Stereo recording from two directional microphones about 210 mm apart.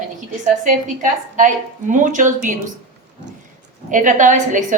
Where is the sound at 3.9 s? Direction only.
35° right (ahead or behind).